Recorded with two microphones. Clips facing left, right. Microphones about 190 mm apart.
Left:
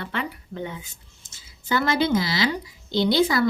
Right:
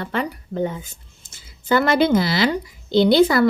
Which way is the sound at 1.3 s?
55° right (ahead or behind).